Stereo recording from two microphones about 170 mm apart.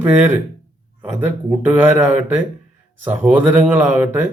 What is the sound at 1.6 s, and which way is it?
Speech, 10° right (ahead or behind).